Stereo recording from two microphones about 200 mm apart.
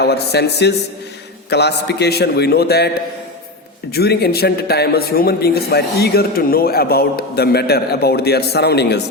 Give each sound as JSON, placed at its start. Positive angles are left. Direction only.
{"t": 0.0, "sound": "a man's voice", "side_deg": 55}
{"t": 3.9, "sound": "a man's voice", "side_deg": 55}